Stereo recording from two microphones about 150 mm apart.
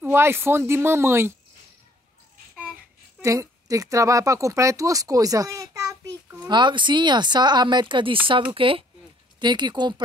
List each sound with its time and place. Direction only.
0.0 s speech: 15° right (ahead or behind)
2.5 s a sound: 5° right (ahead or behind)
3.2 s a woman's voice: 20° right (ahead or behind)